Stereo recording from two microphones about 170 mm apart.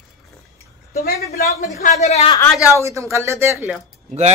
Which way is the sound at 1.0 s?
65° left (ahead or behind).